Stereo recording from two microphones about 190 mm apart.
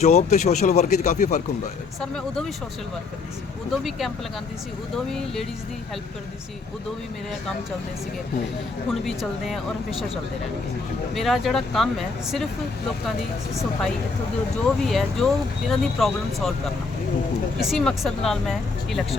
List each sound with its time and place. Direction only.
0.0 s speech: 35° left (ahead or behind)
2.0 s speech: 5° left (ahead or behind)
3.7 s speech: centre (ahead or behind)
5.1 s speech: centre (ahead or behind)
8.9 s speech: centre (ahead or behind)
11.1 s speech: centre (ahead or behind)
14.8 s speech: centre (ahead or behind)
17.6 s speech: centre (ahead or behind)